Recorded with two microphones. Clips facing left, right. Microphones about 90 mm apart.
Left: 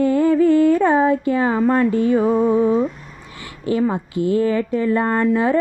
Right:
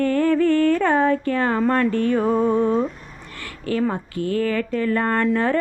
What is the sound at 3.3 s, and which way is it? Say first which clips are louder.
Speech: left 3 dB; 20° left (ahead or behind).